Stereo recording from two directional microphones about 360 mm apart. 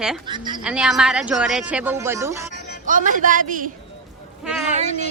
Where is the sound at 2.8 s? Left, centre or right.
Right.